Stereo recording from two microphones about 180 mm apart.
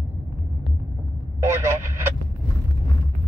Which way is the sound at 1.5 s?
15° right (ahead or behind).